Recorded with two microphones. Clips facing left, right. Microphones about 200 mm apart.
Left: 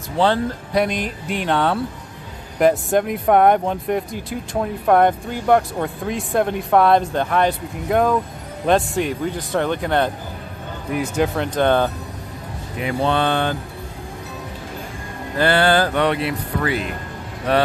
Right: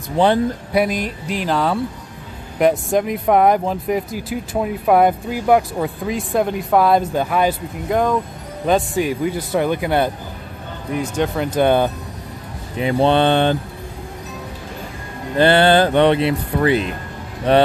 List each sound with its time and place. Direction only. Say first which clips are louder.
0.2 s speech: right 3 dB; 15° right (ahead or behind)
0.8 s speech: right 1 dB; centre (ahead or behind)
10.9 s speech: even; 5° left (ahead or behind)
12.7 s speech: right 5 dB; 25° right (ahead or behind)
15.3 s speech: right 4 dB; 25° right (ahead or behind)